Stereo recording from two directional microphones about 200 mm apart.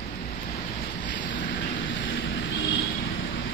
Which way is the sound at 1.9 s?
70° left (ahead or behind).